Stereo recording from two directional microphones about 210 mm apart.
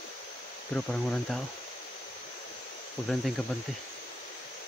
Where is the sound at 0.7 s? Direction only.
5° left (ahead or behind).